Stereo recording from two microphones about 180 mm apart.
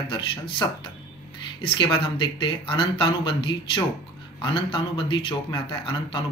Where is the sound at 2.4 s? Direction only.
30° left (ahead or behind).